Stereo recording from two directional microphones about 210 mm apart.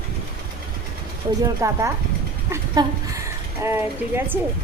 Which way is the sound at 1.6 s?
15° right (ahead or behind).